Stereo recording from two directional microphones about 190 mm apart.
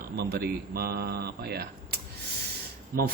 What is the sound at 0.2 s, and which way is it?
Speech, 55° right (ahead or behind).